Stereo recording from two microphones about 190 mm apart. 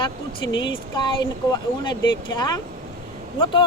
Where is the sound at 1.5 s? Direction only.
20° left (ahead or behind).